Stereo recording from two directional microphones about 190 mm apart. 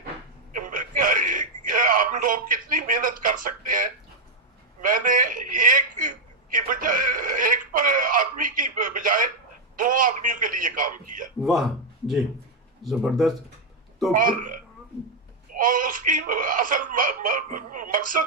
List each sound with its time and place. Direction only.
0.6 s a sound: 45° right (ahead or behind)
4.8 s a man's voice: 45° right (ahead or behind)
12.8 s speech: centre (ahead or behind)
14.1 s a man's voice: 45° right (ahead or behind)